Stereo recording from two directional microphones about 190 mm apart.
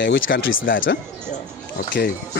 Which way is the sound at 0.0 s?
85° left.